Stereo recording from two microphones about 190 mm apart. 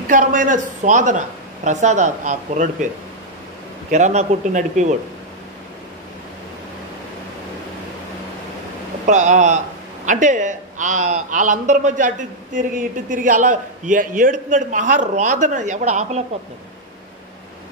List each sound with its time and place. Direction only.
0.1 s a man's voice: 45° right (ahead or behind)
3.9 s a man's voice: 35° right (ahead or behind)
9.0 s a man's voice: 40° right (ahead or behind)